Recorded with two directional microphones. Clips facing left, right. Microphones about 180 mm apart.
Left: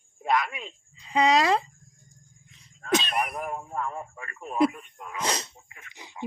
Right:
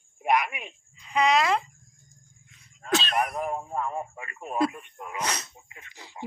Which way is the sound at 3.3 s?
25° right (ahead or behind).